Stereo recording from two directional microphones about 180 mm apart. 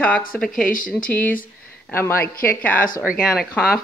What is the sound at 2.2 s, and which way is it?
Speech, 55° left (ahead or behind).